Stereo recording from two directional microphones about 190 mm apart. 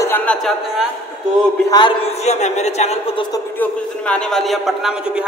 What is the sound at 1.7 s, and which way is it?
Speech, 25° left (ahead or behind).